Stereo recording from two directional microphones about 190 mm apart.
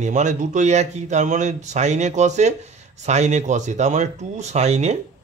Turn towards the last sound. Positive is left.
turn(degrees=-35)  # may be behind; listen again after turning